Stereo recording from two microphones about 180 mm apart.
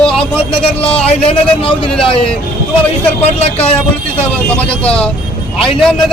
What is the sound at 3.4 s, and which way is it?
Speech, 35° left (ahead or behind).